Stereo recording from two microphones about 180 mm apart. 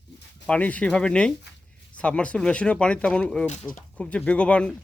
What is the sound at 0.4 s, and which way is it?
Speech, 5° left (ahead or behind).